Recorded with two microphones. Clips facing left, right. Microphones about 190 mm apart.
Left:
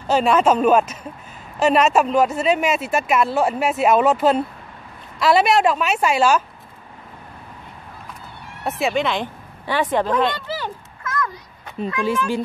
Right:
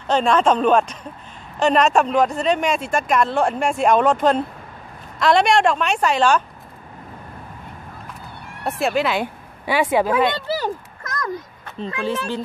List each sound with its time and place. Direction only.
0.0 s speech: 5° left (ahead or behind)
8.6 s speech: centre (ahead or behind)
10.5 s a sound: 40° right (ahead or behind)